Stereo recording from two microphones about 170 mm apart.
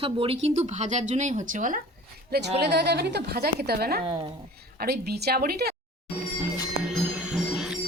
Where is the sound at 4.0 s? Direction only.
30° right (ahead or behind).